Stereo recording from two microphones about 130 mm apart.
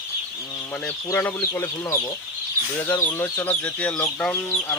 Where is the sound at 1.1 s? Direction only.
20° left (ahead or behind).